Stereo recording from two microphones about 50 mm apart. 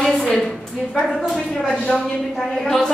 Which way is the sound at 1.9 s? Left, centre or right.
Centre.